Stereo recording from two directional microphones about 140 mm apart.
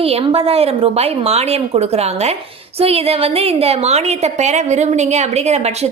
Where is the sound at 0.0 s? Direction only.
45° right (ahead or behind).